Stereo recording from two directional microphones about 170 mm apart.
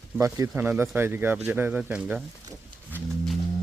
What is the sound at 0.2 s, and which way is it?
A man's voice, 20° right (ahead or behind).